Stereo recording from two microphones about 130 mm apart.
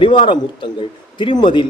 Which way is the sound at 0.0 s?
40° left (ahead or behind).